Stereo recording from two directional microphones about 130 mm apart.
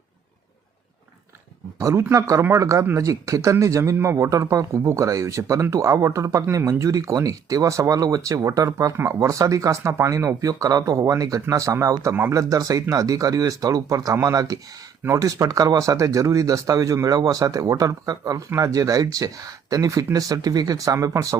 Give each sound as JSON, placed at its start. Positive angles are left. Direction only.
{"t": 1.8, "sound": "speech", "side_deg": -20}